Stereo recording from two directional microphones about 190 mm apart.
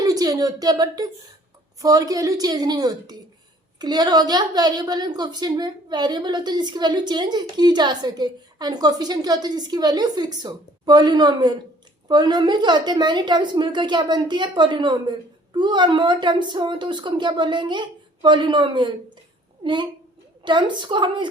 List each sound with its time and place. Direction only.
0.0 s a woman's voice: 20° right (ahead or behind)